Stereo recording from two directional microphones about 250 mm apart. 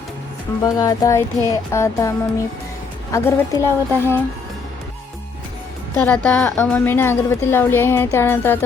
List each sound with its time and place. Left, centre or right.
0.6 s a woman's voice: centre
5.9 s a woman's voice: centre